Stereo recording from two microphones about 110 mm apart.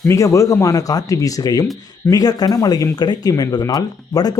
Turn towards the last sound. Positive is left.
turn(degrees=35)  # may be behind; listen again after turning